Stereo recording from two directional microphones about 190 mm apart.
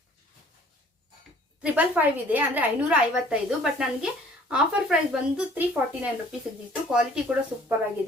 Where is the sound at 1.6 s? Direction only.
10° right (ahead or behind).